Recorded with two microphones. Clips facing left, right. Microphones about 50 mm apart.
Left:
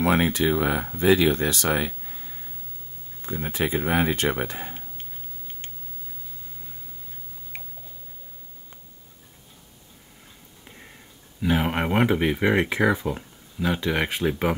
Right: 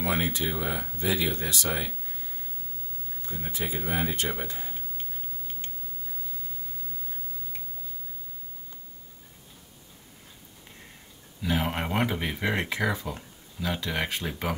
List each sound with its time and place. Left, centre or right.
0.0 s speech: left
3.3 s speech: left
11.4 s speech: left